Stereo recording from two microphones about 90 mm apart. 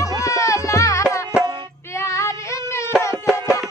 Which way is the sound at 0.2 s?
35° left (ahead or behind).